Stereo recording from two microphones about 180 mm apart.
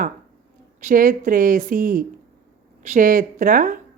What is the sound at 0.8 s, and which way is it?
Speech, 45° right (ahead or behind).